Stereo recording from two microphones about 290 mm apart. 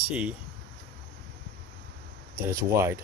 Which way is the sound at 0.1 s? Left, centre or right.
Centre.